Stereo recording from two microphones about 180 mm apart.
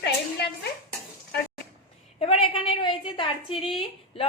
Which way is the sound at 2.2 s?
30° left (ahead or behind).